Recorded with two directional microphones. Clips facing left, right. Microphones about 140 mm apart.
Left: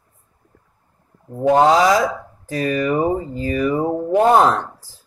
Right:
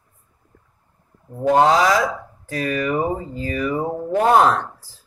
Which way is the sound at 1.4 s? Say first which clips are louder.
Left 2 dB; 15° left (ahead or behind).